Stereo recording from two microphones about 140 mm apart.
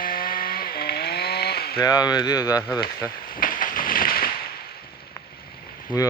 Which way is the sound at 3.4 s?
80° left.